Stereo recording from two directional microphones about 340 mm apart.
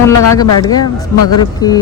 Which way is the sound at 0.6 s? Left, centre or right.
Centre.